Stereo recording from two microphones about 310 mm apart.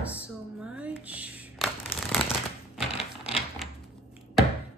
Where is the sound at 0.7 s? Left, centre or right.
Centre.